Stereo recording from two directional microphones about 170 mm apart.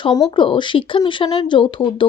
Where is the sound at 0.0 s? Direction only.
25° left (ahead or behind).